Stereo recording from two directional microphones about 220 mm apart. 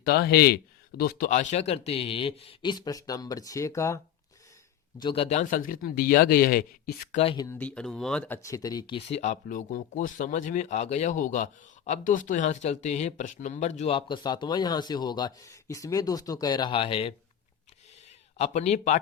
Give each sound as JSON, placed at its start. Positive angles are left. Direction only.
{"t": 0.0, "sound": "speech", "side_deg": 45}
{"t": 4.9, "sound": "speech", "side_deg": 25}
{"t": 7.2, "sound": "speech", "side_deg": 25}
{"t": 7.4, "sound": "speech", "side_deg": 10}
{"t": 18.3, "sound": "speech", "side_deg": 30}